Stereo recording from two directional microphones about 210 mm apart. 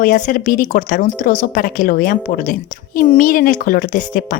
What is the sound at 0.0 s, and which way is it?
A woman's voice, 40° left (ahead or behind).